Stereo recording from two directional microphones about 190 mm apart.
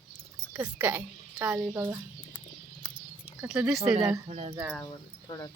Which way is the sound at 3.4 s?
5° right (ahead or behind).